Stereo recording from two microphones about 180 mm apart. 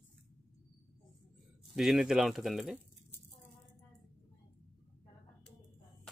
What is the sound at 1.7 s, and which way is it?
Speech, centre (ahead or behind).